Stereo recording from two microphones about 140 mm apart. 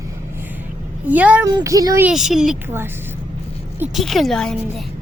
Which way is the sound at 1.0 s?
10° right (ahead or behind).